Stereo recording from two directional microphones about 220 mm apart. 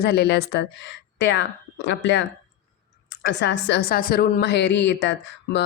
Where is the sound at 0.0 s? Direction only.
50° left (ahead or behind).